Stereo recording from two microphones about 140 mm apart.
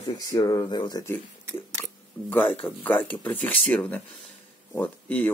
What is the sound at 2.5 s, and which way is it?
Speech, 10° left (ahead or behind).